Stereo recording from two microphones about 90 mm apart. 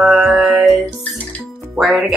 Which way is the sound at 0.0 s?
5° right (ahead or behind).